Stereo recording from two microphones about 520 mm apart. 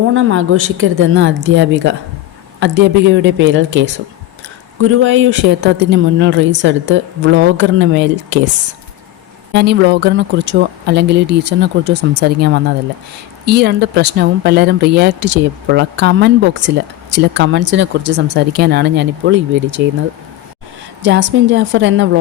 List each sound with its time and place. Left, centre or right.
0.1 s speech: right
9.5 s speech: centre
21.0 s speech: right